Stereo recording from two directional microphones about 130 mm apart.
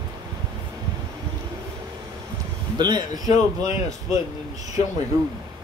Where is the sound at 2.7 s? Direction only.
35° right (ahead or behind).